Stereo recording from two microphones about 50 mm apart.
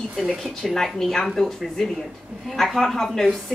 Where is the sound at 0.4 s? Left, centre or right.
Centre.